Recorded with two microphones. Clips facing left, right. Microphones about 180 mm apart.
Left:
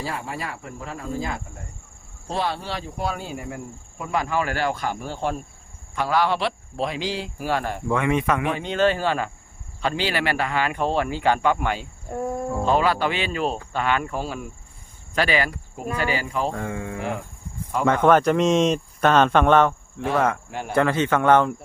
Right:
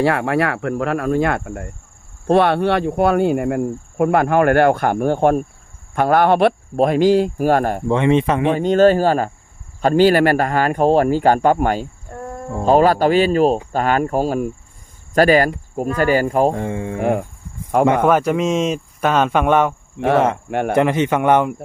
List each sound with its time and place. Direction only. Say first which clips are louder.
0.0 s speech: right 13 dB; 70° right (ahead or behind); by 7.9 s 50° right (ahead or behind)
7.9 s speech: right 5 dB; 25° right (ahead or behind)
8.5 s speech: right 9 dB; 45° right (ahead or behind)
12.1 s speech: left 4 dB; 10° left (ahead or behind)
12.6 s speech: right 9 dB; 45° right (ahead or behind)
16.6 s speech: right 6 dB; 25° right (ahead or behind)
17.0 s speech: right 13 dB; 50° right (ahead or behind)
18.0 s speech: right 1 dB; 5° right (ahead or behind)
20.1 s speech: right 4 dB; 25° right (ahead or behind)
20.5 s speech: right 11 dB; 65° right (ahead or behind)
20.7 s speech: right 3 dB; 20° right (ahead or behind)